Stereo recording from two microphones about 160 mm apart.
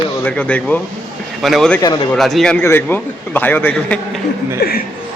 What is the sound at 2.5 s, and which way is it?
A man's voice, 15° left (ahead or behind).